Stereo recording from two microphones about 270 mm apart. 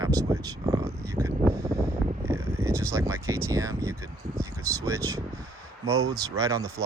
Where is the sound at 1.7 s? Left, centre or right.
Centre.